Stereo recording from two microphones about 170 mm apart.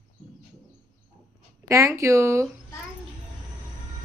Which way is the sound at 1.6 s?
15° right (ahead or behind).